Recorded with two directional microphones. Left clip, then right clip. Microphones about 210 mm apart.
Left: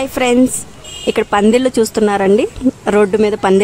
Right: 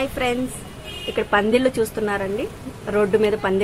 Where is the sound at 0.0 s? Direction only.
55° left (ahead or behind).